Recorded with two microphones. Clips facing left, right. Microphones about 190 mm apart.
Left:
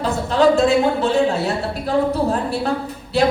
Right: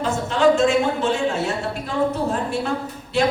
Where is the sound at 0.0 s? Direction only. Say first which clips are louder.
Left 2 dB; 35° left (ahead or behind).